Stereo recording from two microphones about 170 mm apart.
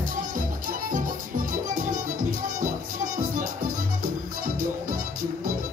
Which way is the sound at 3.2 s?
50° right (ahead or behind).